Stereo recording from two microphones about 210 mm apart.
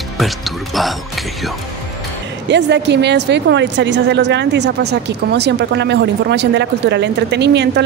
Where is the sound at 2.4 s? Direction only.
55° right (ahead or behind).